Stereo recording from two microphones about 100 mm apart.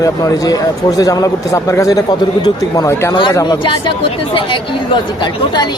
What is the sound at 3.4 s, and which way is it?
Speech, 50° left (ahead or behind).